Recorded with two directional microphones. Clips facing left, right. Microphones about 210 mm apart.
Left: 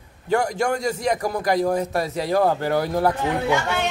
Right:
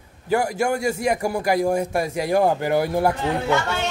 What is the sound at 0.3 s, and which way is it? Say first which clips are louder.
A man's voice: even; 5° right (ahead or behind).